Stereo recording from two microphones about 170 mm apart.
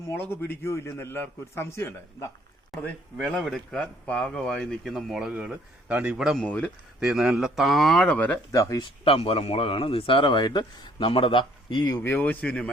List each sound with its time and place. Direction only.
0.1 s a man's voice: 10° left (ahead or behind)
2.7 s speech: centre (ahead or behind); by 8.9 s 20° left (ahead or behind)
9.0 s a man's voice: 35° left (ahead or behind)
12.0 s a man's voice: 10° left (ahead or behind)